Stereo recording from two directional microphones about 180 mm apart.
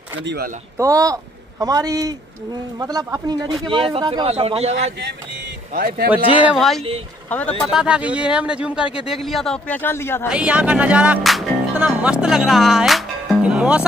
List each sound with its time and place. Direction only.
0.2 s speech: 70° right (ahead or behind)
0.7 s a man's voice: 20° right (ahead or behind); by 4.7 s 35° right (ahead or behind)
5.7 s speech: 55° right (ahead or behind)
6.3 s a man's voice: 5° right (ahead or behind)
7.7 s a man's voice: 5° right (ahead or behind); by 10.2 s 15° left (ahead or behind)
10.3 s speech: 5° right (ahead or behind)